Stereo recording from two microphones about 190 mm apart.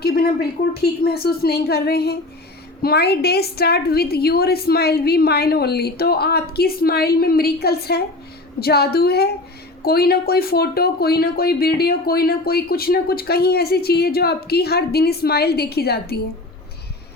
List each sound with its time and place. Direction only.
0.7 s speech: 55° left (ahead or behind)